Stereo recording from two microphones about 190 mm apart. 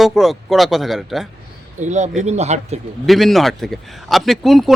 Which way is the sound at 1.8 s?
40° right (ahead or behind).